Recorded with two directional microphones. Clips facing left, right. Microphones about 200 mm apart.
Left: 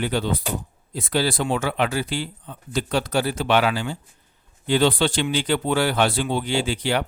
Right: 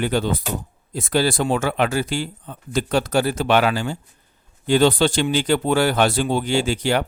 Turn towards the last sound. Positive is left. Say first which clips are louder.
# right 3 dB
turn(degrees=-45)  # may be behind; listen again after turning